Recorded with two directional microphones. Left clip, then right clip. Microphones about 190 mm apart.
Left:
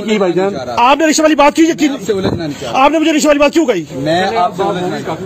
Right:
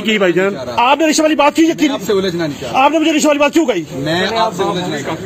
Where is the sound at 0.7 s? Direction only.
45° left (ahead or behind).